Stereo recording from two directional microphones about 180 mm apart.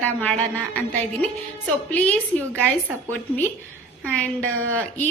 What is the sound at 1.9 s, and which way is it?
Speech, 10° left (ahead or behind).